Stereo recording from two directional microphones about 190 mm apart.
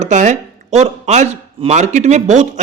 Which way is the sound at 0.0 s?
40° right (ahead or behind).